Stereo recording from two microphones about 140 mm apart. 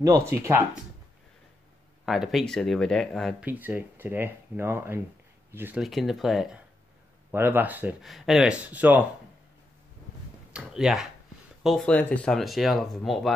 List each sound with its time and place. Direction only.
0.0 s speech: 20° right (ahead or behind)
2.0 s speech: centre (ahead or behind)
3.3 s speech: 10° right (ahead or behind)
5.8 s speech: centre (ahead or behind)
7.3 s speech: 15° right (ahead or behind)
8.0 s speech: centre (ahead or behind)
10.5 s speech: 5° right (ahead or behind)